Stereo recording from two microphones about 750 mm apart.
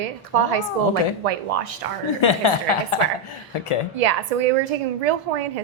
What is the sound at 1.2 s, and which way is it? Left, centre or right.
Speech, right.